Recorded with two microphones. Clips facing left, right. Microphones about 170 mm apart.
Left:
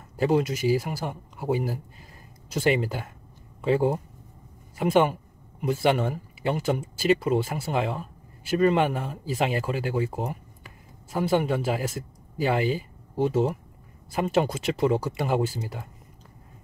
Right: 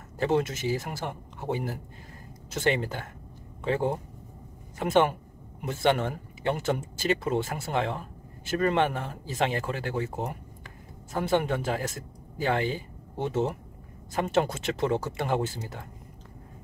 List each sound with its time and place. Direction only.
0.6 s a man's voice: 10° left (ahead or behind)